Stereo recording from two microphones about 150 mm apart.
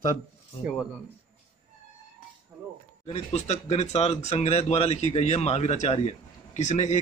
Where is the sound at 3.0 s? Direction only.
45° left (ahead or behind).